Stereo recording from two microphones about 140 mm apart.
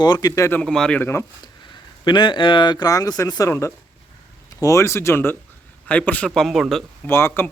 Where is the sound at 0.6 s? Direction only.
5° left (ahead or behind).